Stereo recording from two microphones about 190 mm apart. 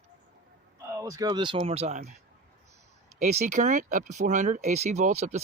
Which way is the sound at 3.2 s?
40° right (ahead or behind).